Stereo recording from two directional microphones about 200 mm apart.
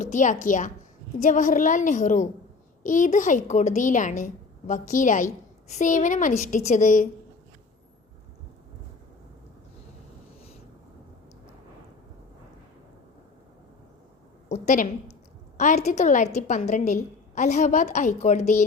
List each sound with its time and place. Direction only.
0.0 s a woman's voice: 40° left (ahead or behind)
14.5 s a woman's voice: 35° left (ahead or behind)